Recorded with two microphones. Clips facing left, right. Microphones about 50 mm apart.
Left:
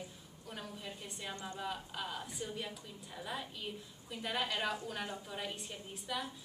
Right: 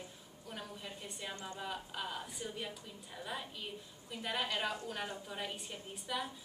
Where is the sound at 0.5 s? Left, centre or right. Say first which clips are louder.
Even; centre.